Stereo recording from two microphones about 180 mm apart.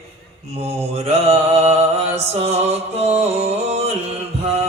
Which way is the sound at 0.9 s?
35° right (ahead or behind).